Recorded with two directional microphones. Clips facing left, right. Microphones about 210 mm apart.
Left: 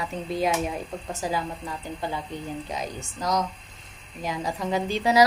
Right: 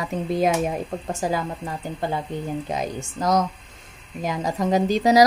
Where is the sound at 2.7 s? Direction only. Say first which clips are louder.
Right 5 dB; 50° right (ahead or behind).